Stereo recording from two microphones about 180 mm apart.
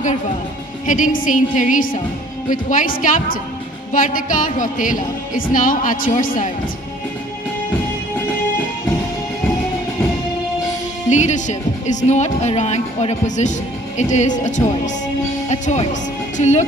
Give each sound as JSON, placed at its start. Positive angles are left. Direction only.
{"t": 0.8, "sound": "music", "side_deg": 45}
{"t": 11.1, "sound": "speech", "side_deg": 40}